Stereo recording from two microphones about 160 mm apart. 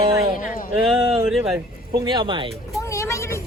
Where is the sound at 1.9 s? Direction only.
30° right (ahead or behind).